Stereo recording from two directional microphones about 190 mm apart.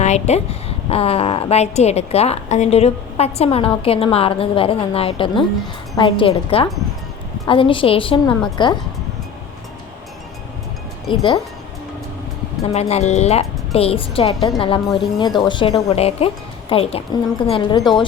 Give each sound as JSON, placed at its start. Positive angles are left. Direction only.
{"t": 0.0, "sound": "a woman's voice", "side_deg": 35}
{"t": 11.1, "sound": "a woman's voice", "side_deg": 25}
{"t": 12.6, "sound": "a woman's voice", "side_deg": 35}